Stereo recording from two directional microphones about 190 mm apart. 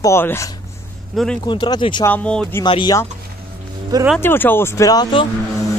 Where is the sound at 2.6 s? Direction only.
25° left (ahead or behind).